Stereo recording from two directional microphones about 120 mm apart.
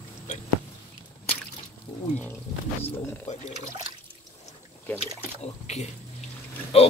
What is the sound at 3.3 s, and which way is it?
Speech, 75° left (ahead or behind).